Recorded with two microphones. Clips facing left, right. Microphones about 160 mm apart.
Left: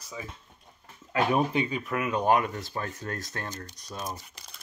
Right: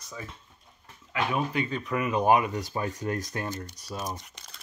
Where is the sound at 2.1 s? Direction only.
10° right (ahead or behind).